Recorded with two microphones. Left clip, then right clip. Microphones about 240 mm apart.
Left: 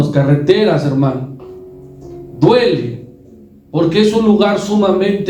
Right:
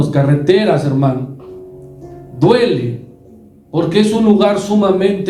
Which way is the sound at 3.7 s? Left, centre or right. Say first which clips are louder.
Left 1 dB; right.